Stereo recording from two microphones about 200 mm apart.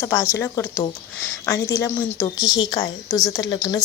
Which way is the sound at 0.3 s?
10° left (ahead or behind).